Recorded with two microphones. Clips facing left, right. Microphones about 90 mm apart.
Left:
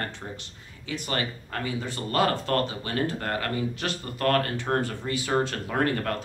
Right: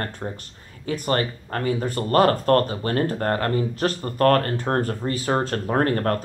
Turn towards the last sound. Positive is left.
turn(degrees=-40)  # may be behind; listen again after turning